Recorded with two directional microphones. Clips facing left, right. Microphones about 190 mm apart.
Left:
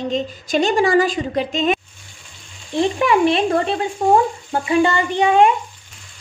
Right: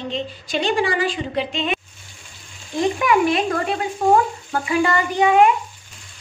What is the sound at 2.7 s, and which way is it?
A woman's voice, 30° left (ahead or behind).